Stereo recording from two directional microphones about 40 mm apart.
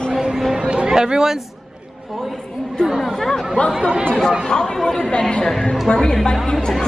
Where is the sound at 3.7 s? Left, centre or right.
Centre.